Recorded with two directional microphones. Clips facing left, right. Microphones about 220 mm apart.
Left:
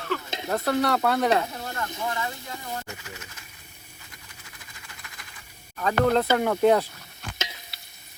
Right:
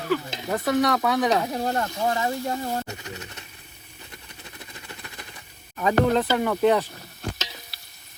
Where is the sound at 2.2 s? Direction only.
40° right (ahead or behind).